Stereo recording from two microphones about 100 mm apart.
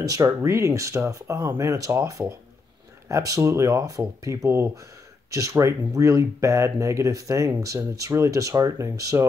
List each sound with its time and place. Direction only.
0.0 s speech: 35° right (ahead or behind)